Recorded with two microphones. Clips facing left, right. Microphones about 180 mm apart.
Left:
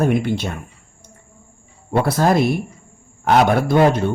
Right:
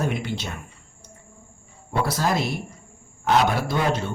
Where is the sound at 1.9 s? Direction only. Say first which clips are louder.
Left 7 dB; 55° left (ahead or behind).